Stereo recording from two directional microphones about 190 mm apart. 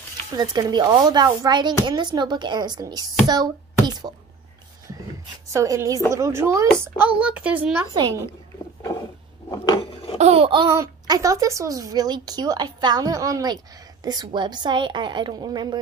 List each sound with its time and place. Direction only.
0.4 s speech: 20° right (ahead or behind)
5.5 s speech: 15° right (ahead or behind)
7.9 s speech: 20° right (ahead or behind)
10.1 s speech: 35° right (ahead or behind)